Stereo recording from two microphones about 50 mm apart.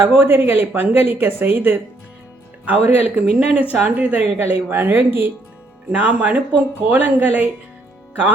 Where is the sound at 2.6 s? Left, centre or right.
Right.